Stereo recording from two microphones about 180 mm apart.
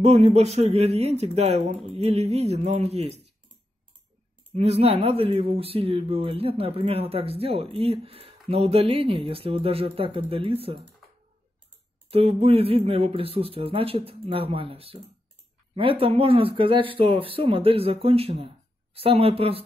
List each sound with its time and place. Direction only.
0.0 s speech: 35° right (ahead or behind)
4.6 s speech: 35° right (ahead or behind)
12.1 s speech: 30° right (ahead or behind)